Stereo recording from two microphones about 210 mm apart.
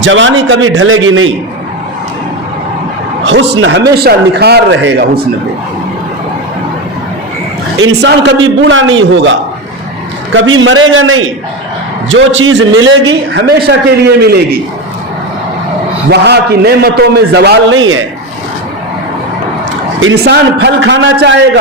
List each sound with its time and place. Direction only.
0.0 s a man's voice: 65° right (ahead or behind)
3.2 s a man's voice: 60° right (ahead or behind)
4.0 s a man's voice: 50° right (ahead or behind)
7.8 s a man's voice: 55° right (ahead or behind)
10.3 s a man's voice: 70° right (ahead or behind)
14.2 s a man's voice: 50° right (ahead or behind)
16.0 s a man's voice: 50° right (ahead or behind); by 18.0 s 70° right (ahead or behind)
20.0 s a man's voice: 60° right (ahead or behind)